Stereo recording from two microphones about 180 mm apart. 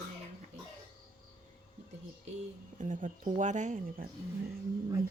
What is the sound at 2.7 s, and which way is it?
Speech, 45° right (ahead or behind).